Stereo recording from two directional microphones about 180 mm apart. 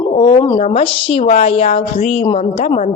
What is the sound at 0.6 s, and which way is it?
A woman's voice, 35° left (ahead or behind).